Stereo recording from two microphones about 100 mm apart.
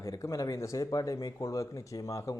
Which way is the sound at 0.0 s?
30° left (ahead or behind).